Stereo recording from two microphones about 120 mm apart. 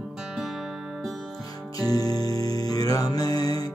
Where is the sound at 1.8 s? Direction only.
30° left (ahead or behind).